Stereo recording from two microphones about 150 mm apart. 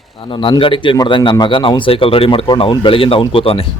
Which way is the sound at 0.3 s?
35° left (ahead or behind).